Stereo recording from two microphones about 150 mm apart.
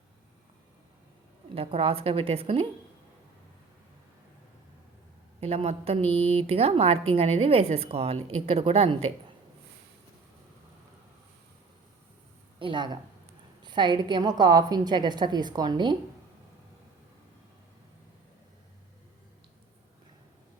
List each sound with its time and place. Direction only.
1.5 s a woman's voice: 40° right (ahead or behind)
5.4 s a woman's voice: 40° right (ahead or behind)
12.5 s a woman's voice: 30° right (ahead or behind)